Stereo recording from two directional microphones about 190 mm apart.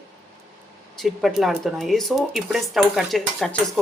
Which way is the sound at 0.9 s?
Centre (ahead or behind).